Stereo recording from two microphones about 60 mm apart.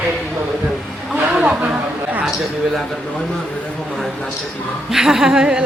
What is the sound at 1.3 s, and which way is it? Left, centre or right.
Chatter, centre.